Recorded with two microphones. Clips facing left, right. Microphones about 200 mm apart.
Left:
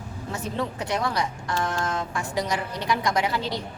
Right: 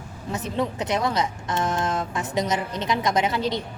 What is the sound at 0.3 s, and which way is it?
A woman's voice, 20° right (ahead or behind).